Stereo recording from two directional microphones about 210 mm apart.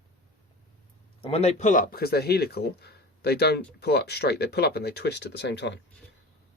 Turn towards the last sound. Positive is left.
turn(degrees=55)  # may be behind; listen again after turning